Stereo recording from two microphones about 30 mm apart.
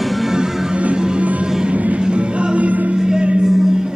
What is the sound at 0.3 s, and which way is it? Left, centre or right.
Music, centre.